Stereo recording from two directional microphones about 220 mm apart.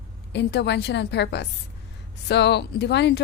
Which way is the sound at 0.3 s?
50° left (ahead or behind).